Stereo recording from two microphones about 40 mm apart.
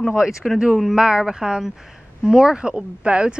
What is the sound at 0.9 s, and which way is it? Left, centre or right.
A woman's voice, centre.